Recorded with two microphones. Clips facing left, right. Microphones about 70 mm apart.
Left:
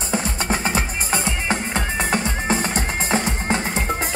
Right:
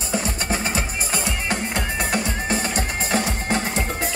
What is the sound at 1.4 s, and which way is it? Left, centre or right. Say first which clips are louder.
Music: left 2 dB; left.